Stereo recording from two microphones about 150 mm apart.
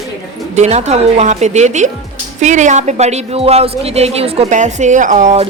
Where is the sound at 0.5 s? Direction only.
50° right (ahead or behind).